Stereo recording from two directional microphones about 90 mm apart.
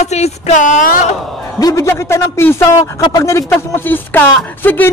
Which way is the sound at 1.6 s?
35° left (ahead or behind).